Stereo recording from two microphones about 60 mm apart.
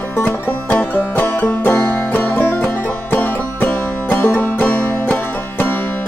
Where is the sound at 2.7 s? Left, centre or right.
Left.